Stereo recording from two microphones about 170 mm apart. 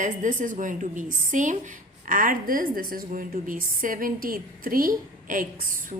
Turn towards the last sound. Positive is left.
turn(degrees=-50)  # may be behind; listen again after turning